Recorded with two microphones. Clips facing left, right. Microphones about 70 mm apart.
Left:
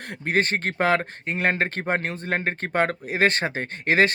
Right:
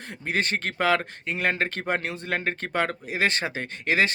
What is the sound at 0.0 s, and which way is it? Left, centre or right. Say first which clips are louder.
Speech: left 4 dB; left.